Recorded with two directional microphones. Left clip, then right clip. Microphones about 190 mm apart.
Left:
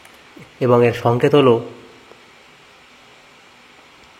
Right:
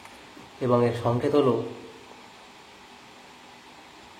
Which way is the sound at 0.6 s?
35° left (ahead or behind).